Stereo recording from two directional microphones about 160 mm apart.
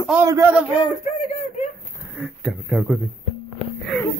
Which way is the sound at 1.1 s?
45° left (ahead or behind).